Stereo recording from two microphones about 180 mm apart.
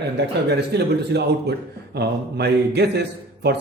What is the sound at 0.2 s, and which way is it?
A man's voice, 65° right (ahead or behind).